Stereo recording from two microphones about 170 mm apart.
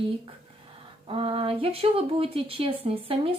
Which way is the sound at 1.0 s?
35° right (ahead or behind).